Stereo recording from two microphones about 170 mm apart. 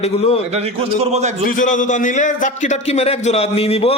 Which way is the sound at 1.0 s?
40° right (ahead or behind).